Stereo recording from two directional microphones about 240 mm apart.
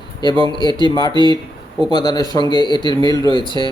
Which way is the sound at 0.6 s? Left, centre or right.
Centre.